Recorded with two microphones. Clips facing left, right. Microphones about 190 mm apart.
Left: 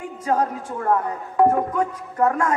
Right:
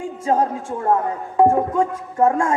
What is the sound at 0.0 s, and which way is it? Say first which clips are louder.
A woman's voice: right 3 dB; 25° right (ahead or behind).